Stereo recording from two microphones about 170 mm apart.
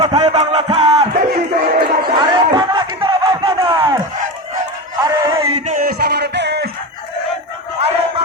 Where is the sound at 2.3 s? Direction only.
25° right (ahead or behind).